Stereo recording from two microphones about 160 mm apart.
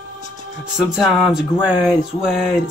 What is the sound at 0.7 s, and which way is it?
Music, centre (ahead or behind).